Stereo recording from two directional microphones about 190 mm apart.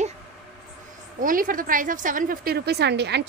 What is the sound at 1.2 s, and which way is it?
A woman's voice, 45° right (ahead or behind).